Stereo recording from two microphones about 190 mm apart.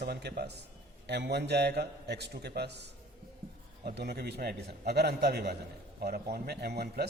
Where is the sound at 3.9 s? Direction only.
55° right (ahead or behind).